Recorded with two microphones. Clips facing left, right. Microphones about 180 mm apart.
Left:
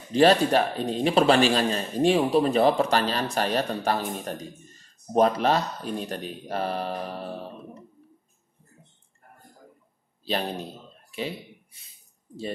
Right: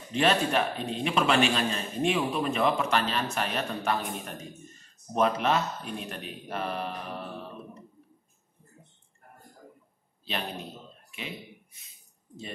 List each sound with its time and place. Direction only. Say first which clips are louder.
0.1 s a man's voice: left 6 dB; 35° left (ahead or behind)
5.1 s a man's voice: left 4 dB; 35° left (ahead or behind)
11.1 s a sound: left 8 dB; 35° left (ahead or behind)